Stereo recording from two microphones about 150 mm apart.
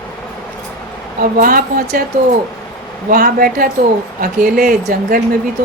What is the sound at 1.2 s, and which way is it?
Speech, 70° right (ahead or behind).